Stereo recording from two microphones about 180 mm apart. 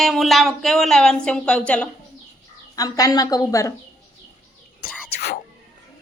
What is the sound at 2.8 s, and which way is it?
Speech, 20° left (ahead or behind).